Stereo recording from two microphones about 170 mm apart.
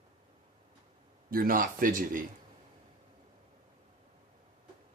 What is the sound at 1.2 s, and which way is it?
Speech, 55° right (ahead or behind).